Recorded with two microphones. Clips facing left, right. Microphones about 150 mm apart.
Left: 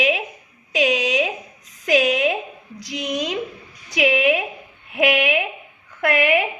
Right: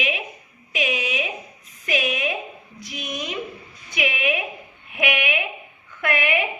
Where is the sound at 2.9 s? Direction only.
90° left.